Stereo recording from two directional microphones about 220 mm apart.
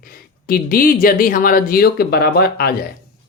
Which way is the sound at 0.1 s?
40° left (ahead or behind).